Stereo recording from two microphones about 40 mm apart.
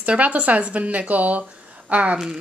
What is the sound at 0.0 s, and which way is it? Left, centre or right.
Speech, right.